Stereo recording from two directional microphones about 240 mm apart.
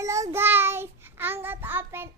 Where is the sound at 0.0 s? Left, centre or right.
Centre.